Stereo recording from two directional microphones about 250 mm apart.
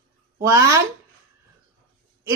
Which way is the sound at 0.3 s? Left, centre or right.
Centre.